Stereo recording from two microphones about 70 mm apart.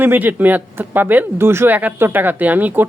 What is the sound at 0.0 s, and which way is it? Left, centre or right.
Speech, right.